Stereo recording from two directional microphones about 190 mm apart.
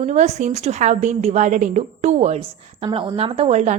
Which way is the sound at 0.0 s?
40° right (ahead or behind).